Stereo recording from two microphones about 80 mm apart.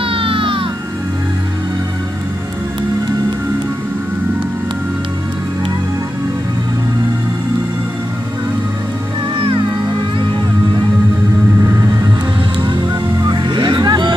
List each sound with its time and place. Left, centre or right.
0.0 s music: right
13.3 s music: right